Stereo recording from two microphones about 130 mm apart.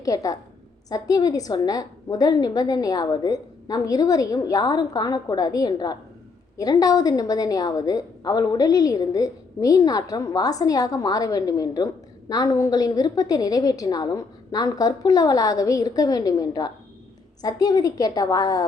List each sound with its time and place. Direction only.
0.0 s a woman's voice: 25° left (ahead or behind)